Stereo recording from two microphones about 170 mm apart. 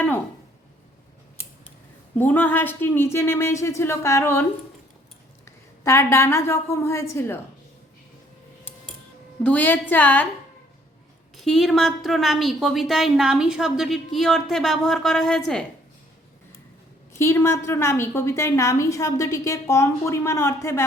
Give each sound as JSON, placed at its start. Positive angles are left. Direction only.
{"t": 2.1, "sound": "a woman's voice", "side_deg": 10}
{"t": 5.5, "sound": "a woman's voice", "side_deg": 15}
{"t": 9.4, "sound": "a woman's voice", "side_deg": 10}
{"t": 11.3, "sound": "a woman's voice", "side_deg": 0}
{"t": 17.2, "sound": "a woman's voice", "side_deg": 15}